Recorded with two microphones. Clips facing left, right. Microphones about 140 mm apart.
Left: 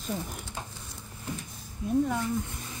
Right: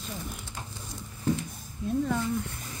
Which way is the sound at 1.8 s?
15° left (ahead or behind).